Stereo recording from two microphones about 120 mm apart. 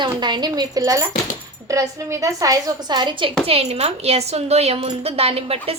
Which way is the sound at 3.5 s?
60° right (ahead or behind).